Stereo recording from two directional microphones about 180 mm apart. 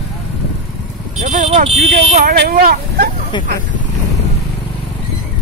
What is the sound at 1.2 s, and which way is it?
Speech, 40° right (ahead or behind).